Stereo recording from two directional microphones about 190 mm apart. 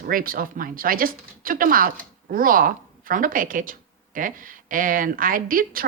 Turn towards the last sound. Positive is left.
turn(degrees=-50)  # may be behind; listen again after turning